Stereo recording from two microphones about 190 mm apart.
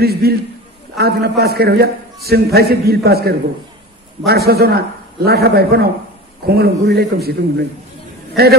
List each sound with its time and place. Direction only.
0.0 s a man's voice: 55° right (ahead or behind)
4.5 s a man's voice: 55° right (ahead or behind)